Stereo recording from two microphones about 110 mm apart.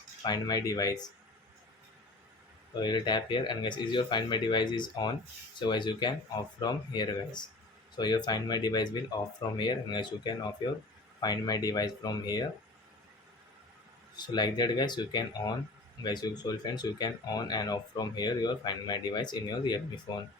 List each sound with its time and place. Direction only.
0.2 s speech: 40° left (ahead or behind)
2.7 s speech: 40° left (ahead or behind)
14.2 s speech: 40° left (ahead or behind)